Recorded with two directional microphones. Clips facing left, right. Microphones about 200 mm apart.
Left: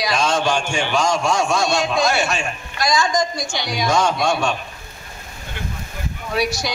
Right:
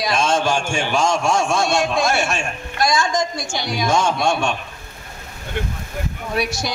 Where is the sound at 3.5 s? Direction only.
50° right (ahead or behind).